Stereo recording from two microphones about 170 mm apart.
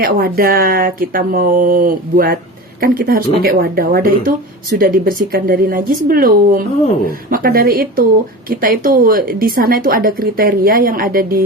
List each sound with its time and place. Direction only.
0.0 s speech: 60° right (ahead or behind)